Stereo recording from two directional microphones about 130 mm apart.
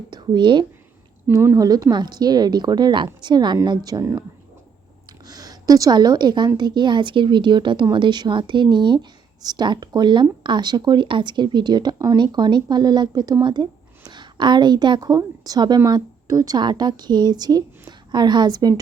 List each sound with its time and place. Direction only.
0.1 s speech: 35° right (ahead or behind)
1.3 s a woman's voice: 25° right (ahead or behind)
5.3 s a woman's voice: 30° right (ahead or behind)